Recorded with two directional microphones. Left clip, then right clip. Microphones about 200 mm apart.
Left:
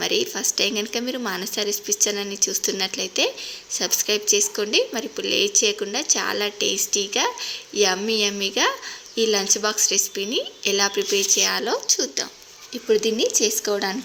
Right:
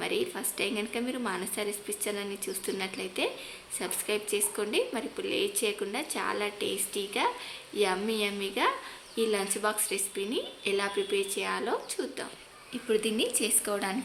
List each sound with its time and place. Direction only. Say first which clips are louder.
0.0 s a woman's voice: left 9 dB; 25° left (ahead or behind)